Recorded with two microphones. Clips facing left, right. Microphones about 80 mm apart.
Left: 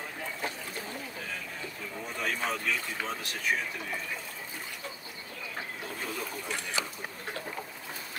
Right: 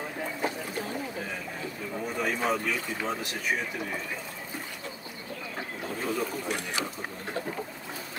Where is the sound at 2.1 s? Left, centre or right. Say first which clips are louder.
Right 4 dB; centre.